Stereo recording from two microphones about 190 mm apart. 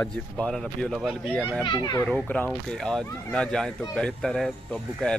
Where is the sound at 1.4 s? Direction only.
15° right (ahead or behind).